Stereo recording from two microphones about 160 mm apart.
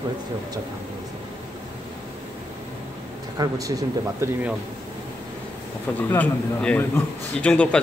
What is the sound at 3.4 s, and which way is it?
Speech, 20° right (ahead or behind).